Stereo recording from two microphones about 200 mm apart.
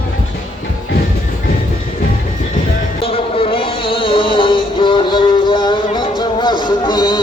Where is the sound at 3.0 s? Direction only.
25° left (ahead or behind).